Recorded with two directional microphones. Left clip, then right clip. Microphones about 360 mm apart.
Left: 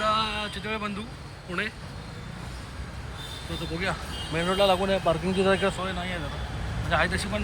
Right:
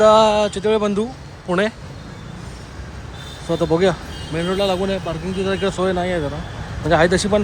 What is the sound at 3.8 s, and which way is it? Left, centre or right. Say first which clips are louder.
Speech: right 11 dB; centre.